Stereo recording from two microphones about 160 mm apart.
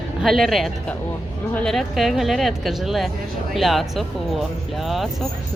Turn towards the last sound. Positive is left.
turn(degrees=0)  # may be behind; listen again after turning